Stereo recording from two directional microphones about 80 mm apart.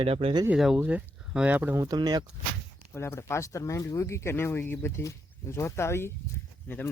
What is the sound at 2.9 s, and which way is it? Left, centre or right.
Speech, left.